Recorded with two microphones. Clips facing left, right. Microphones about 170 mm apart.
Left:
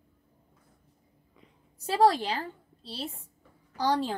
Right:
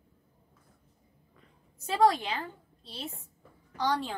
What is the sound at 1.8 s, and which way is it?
A woman's voice, 35° left (ahead or behind).